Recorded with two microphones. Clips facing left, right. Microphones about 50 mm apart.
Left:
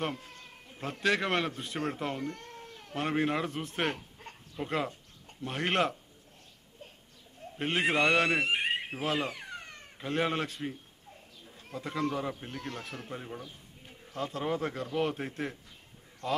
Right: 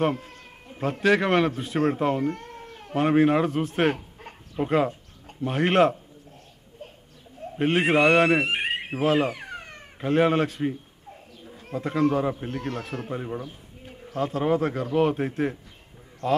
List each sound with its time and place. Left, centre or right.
1.0 s speech: centre
1.8 s speech: centre
7.5 s speech: centre
8.5 s a sound: right
9.1 s speech: right
9.8 s speech: centre
11.4 s a sound: right
11.8 s a man's voice: centre
13.4 s a sound: right
14.3 s speech: centre